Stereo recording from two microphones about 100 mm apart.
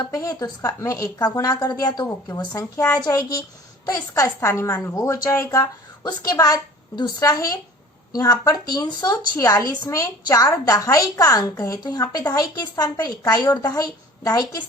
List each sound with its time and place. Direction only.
0.0 s speech: 35° left (ahead or behind)